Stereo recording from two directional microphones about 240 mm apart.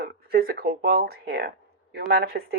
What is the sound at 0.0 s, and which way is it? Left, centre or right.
Speech, right.